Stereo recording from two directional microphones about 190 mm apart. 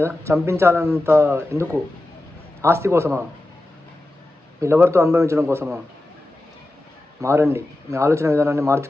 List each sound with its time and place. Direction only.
0.0 s speech: 15° right (ahead or behind)
4.6 s speech: 15° right (ahead or behind)
7.2 s speech: 15° right (ahead or behind)